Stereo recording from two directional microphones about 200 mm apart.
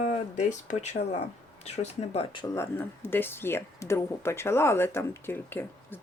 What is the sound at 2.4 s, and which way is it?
Speech, 15° left (ahead or behind).